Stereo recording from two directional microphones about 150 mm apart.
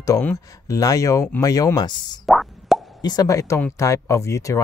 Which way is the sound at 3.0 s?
25° left (ahead or behind).